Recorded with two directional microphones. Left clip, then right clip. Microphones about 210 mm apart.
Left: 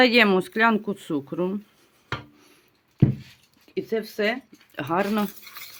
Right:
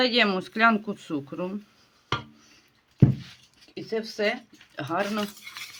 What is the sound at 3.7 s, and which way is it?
Speech, 55° left (ahead or behind).